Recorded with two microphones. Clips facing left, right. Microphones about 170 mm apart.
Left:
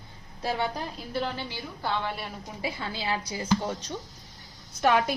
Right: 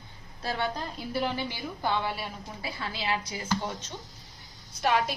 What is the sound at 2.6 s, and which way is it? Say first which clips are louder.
Speech: left 2 dB; 25° left (ahead or behind).